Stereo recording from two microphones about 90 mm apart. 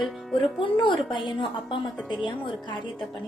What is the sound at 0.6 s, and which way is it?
Speech, 65° left (ahead or behind).